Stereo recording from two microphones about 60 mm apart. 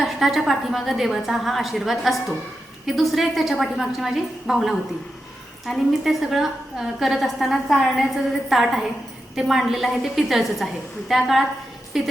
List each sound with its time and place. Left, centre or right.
0.0 s a woman's voice: centre